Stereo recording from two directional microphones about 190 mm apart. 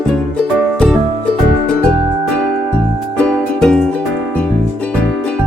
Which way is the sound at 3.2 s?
5° left (ahead or behind).